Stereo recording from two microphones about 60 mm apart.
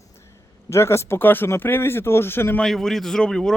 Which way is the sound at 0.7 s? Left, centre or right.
Left.